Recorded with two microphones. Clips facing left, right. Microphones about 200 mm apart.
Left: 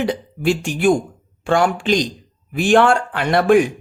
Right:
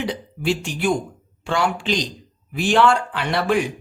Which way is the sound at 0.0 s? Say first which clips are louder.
Left 5 dB; 50° left (ahead or behind).